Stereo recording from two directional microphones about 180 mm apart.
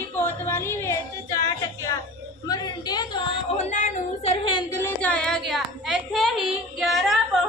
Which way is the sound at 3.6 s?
40° left (ahead or behind).